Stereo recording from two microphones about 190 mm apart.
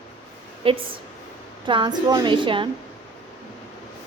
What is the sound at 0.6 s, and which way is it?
Speech, 30° right (ahead or behind).